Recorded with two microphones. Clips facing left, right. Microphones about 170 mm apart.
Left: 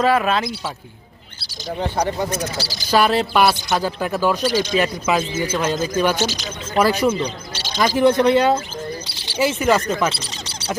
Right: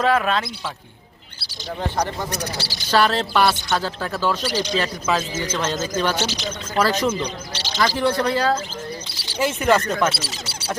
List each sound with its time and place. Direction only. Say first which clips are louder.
0.0 s speech: left 2 dB; 5° left (ahead or behind)
2.6 s speech: left 3 dB; 40° left (ahead or behind)
2.9 s speech: left 2 dB; 10° left (ahead or behind)
9.3 s speech: left 1 dB; 5° left (ahead or behind)